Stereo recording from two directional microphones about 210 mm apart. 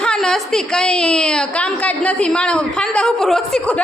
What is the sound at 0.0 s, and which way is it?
A woman's voice, 5° left (ahead or behind).